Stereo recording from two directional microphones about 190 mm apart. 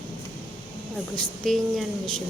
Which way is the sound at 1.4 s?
Centre (ahead or behind).